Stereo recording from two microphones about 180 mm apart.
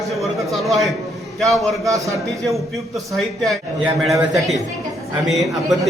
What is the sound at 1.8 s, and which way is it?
Speech, 20° right (ahead or behind).